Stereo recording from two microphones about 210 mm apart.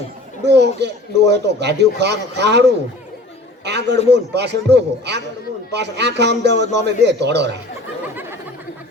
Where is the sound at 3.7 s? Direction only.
55° right (ahead or behind).